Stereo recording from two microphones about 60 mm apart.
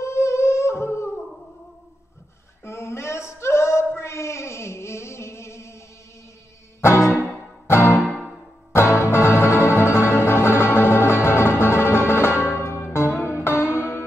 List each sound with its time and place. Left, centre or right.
0.0 s humming: left
2.6 s a sound: left
6.8 s music: left
7.9 s music: centre
8.8 s music: left